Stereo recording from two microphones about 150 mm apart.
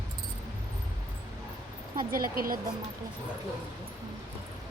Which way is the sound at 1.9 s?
75° right (ahead or behind).